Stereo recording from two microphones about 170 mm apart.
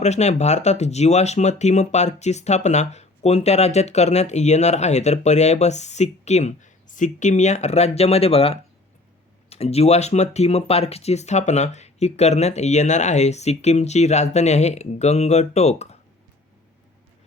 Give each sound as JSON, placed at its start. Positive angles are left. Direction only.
{"t": 0.0, "sound": "speech", "side_deg": 40}